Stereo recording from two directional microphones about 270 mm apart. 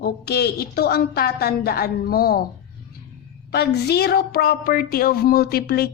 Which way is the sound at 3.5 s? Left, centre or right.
Left.